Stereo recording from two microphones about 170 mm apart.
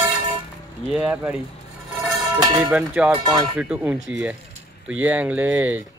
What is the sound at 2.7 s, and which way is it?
Speech, 5° right (ahead or behind).